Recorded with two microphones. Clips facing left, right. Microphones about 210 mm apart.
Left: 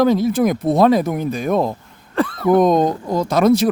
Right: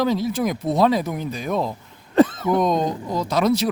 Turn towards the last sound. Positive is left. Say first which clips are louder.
# left 5 dB
turn(degrees=50)  # may be behind; listen again after turning